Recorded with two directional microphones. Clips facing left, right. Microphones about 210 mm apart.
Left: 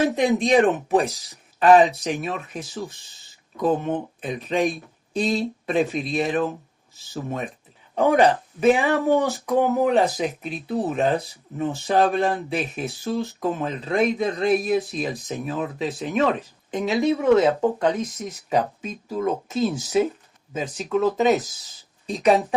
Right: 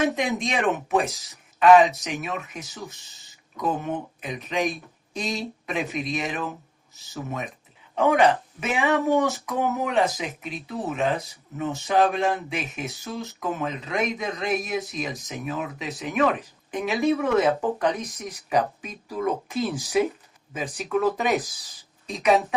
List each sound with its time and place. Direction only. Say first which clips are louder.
0.0 s speech: left 4 dB; 35° left (ahead or behind)